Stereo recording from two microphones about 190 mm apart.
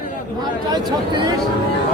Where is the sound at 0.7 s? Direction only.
25° right (ahead or behind).